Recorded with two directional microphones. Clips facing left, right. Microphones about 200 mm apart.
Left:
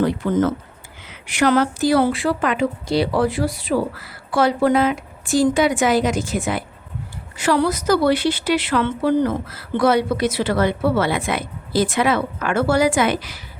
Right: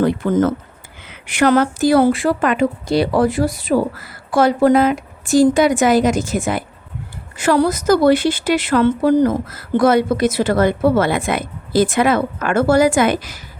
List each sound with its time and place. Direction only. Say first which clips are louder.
0.0 s a woman's voice: right 3 dB; 50° right (ahead or behind)